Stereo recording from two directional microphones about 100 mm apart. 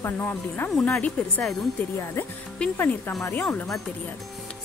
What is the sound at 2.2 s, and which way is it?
Speech, 25° left (ahead or behind).